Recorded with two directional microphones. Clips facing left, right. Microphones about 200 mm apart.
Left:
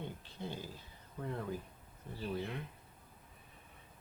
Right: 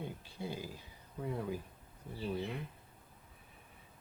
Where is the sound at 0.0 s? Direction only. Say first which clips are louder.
Right 1 dB; 10° right (ahead or behind).